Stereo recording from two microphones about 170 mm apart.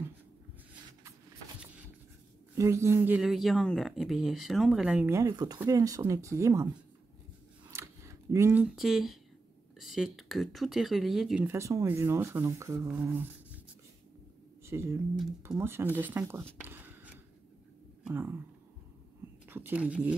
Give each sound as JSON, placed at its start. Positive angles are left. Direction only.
{"t": 2.5, "sound": "speech", "side_deg": -15}
{"t": 7.7, "sound": "a sound", "side_deg": -15}
{"t": 8.7, "sound": "speech", "side_deg": 0}
{"t": 11.4, "sound": "speech", "side_deg": -15}
{"t": 14.6, "sound": "speech", "side_deg": -15}
{"t": 16.6, "sound": "a sound", "side_deg": -10}
{"t": 18.0, "sound": "speech", "side_deg": -15}
{"t": 19.4, "sound": "speech", "side_deg": -10}